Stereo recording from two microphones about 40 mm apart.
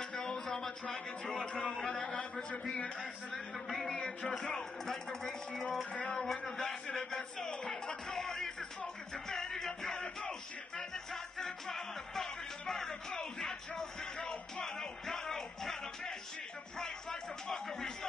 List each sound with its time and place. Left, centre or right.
0.0 s music: centre
1.6 s a man's voice: centre
2.0 s music: centre
3.6 s a man's voice: centre
3.9 s music: left
11.3 s music: centre
13.7 s music: left
14.6 s music: centre